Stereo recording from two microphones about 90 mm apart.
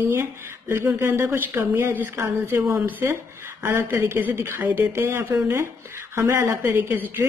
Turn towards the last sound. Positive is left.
turn(degrees=-20)  # may be behind; listen again after turning